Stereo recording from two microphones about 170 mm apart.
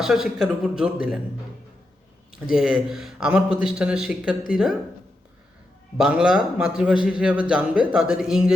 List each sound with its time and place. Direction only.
0.0 s a man's voice: 5° right (ahead or behind)
2.3 s a man's voice: 5° right (ahead or behind)
6.0 s a man's voice: 5° right (ahead or behind)